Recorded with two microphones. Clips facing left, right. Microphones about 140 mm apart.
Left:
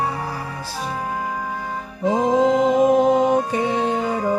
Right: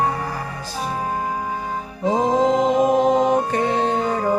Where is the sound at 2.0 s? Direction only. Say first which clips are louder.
Even; 20° right (ahead or behind).